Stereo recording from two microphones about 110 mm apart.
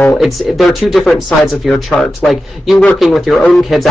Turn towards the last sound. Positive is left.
turn(degrees=0)  # may be behind; listen again after turning